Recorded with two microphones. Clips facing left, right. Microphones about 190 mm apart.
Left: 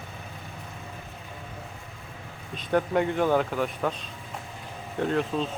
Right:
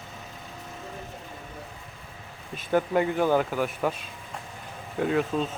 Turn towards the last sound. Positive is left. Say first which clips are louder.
# right 1 dB
turn(degrees=-5)  # may be behind; listen again after turning